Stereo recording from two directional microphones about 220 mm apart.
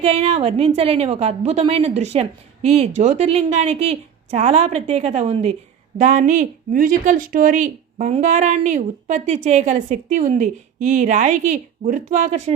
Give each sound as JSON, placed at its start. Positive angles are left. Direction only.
{"t": 0.0, "sound": "a woman's voice", "side_deg": -30}